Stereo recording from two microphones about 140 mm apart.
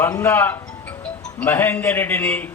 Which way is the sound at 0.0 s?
15° left (ahead or behind).